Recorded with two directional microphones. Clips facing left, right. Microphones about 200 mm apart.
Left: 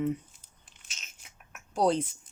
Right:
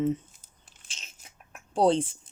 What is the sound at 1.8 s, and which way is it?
Speech, 30° right (ahead or behind).